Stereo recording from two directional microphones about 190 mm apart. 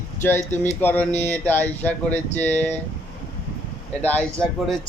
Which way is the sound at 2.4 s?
35° left (ahead or behind).